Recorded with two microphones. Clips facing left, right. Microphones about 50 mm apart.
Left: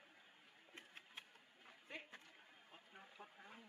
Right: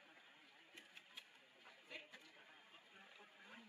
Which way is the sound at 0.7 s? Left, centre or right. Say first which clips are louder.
Left 3 dB; left.